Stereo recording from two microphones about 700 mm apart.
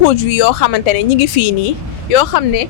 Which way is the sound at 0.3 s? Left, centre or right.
Left.